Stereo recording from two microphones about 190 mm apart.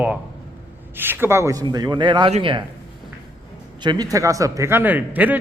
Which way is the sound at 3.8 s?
20° right (ahead or behind).